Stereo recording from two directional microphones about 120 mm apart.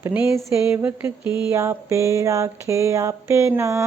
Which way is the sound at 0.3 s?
25° right (ahead or behind).